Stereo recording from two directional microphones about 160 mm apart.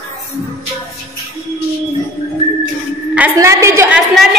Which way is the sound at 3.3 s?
20° right (ahead or behind).